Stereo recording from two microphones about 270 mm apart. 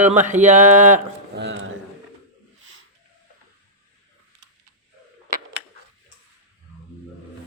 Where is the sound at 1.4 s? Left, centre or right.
Right.